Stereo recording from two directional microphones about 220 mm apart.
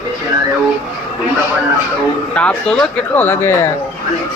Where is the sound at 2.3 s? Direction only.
5° left (ahead or behind).